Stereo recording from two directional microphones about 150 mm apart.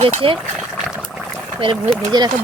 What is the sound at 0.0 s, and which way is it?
Speech, 40° right (ahead or behind).